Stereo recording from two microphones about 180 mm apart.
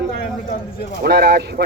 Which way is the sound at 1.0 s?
65° right (ahead or behind).